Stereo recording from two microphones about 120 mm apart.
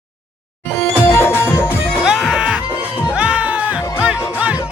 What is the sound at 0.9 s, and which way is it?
Music, 20° left (ahead or behind).